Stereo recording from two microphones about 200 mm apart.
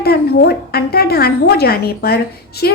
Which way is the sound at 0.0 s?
50° left (ahead or behind).